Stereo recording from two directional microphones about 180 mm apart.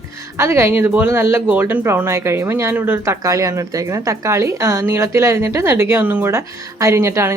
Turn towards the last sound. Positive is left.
turn(degrees=-15)  # may be behind; listen again after turning